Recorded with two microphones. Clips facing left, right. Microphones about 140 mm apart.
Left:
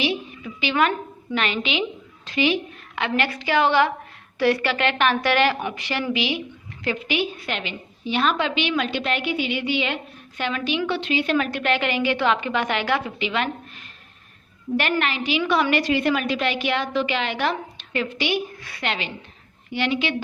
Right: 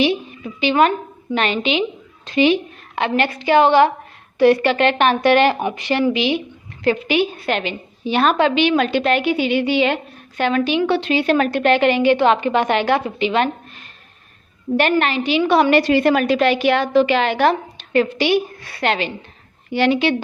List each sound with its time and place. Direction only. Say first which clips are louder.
0.4 s a woman's voice: right 6 dB; 30° right (ahead or behind)
6.8 s a woman's voice: right 7 dB; 50° right (ahead or behind); by 13.5 s 35° right (ahead or behind)
14.8 s a woman's voice: right 7 dB; 35° right (ahead or behind)